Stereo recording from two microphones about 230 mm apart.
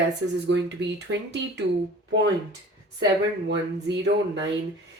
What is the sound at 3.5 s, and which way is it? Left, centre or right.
Speech, right.